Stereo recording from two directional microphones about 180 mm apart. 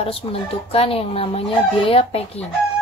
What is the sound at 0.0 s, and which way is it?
Speech, 30° left (ahead or behind).